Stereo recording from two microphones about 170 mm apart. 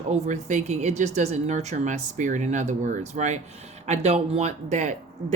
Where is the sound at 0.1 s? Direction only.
45° right (ahead or behind).